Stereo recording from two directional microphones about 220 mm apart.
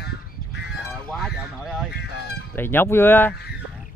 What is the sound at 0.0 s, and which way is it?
Goose, 50° left (ahead or behind).